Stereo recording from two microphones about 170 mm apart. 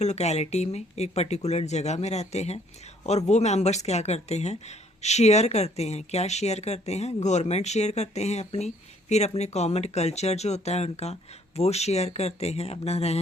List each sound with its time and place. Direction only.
0.0 s speech: 40° left (ahead or behind)